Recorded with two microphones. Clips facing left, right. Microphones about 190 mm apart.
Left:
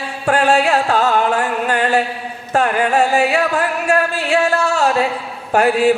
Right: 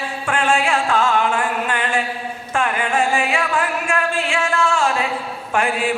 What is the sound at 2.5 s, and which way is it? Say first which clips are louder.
Music: left 5 dB; 40° left (ahead or behind).